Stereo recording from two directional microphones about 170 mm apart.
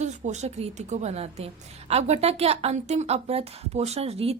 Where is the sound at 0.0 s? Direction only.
40° right (ahead or behind).